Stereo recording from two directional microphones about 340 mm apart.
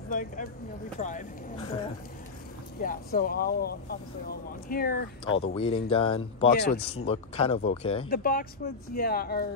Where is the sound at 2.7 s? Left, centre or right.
Left.